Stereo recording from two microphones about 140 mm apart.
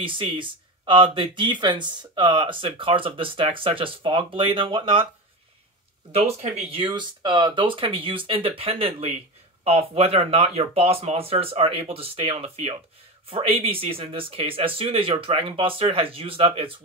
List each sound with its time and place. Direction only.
0.0 s speech: 35° right (ahead or behind)
6.1 s speech: 50° right (ahead or behind)
6.7 s speech: 35° right (ahead or behind)